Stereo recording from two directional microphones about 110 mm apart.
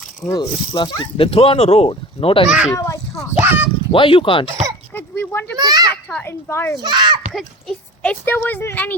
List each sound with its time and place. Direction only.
0.3 s speech: 40° left (ahead or behind)
2.5 s a child's voice: 10° right (ahead or behind)
2.7 s speech: 30° left (ahead or behind)
3.4 s a sound: 20° right (ahead or behind)
3.9 s speech: 50° left (ahead or behind)
4.9 s a sound: 20° left (ahead or behind)
5.5 s a child's voice: 35° right (ahead or behind)
6.1 s a woman's voice: 15° left (ahead or behind)
6.8 s speech: 40° right (ahead or behind)
7.3 s a sound: 5° left (ahead or behind)
8.1 s a woman's voice: 15° left (ahead or behind)